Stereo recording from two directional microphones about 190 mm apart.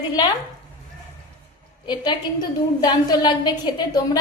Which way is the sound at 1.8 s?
25° left (ahead or behind).